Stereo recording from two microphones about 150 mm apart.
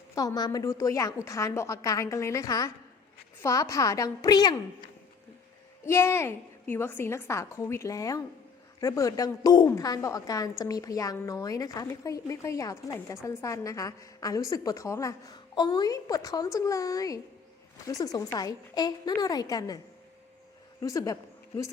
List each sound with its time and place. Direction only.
0.1 s a woman's voice: 25° left (ahead or behind)
5.8 s a woman's voice: 15° left (ahead or behind)
20.8 s a man's voice: 20° left (ahead or behind)